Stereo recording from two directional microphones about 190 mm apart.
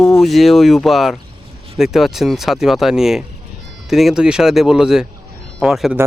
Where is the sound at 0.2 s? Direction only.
Centre (ahead or behind).